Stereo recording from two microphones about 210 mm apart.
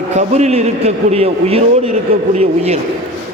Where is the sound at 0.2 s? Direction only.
30° right (ahead or behind).